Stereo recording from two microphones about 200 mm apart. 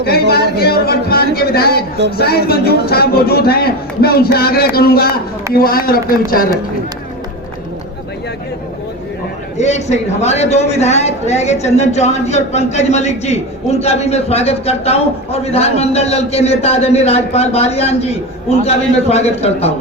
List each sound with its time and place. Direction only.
0.0 s speech: 50° left (ahead or behind)
9.6 s a man's voice: 35° left (ahead or behind)